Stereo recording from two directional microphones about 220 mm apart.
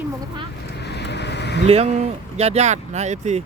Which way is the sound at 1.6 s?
30° right (ahead or behind).